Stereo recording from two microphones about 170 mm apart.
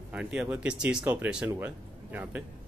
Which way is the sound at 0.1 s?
5° right (ahead or behind).